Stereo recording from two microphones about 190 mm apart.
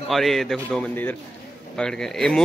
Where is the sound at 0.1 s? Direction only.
Centre (ahead or behind).